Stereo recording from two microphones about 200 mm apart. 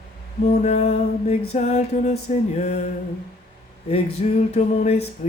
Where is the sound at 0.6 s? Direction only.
35° left (ahead or behind).